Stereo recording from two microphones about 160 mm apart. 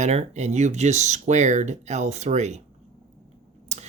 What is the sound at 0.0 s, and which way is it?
Speech, 45° right (ahead or behind).